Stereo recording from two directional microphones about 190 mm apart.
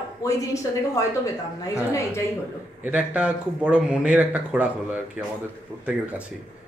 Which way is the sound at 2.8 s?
5° right (ahead or behind).